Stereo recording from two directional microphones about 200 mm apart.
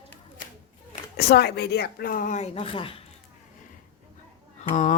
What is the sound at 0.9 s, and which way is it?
Speech, 50° left (ahead or behind).